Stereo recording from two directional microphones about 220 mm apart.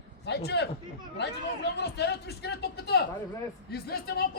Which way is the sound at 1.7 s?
50° left (ahead or behind).